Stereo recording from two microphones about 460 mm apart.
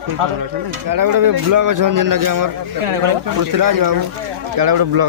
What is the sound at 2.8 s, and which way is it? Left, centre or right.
Speech, right.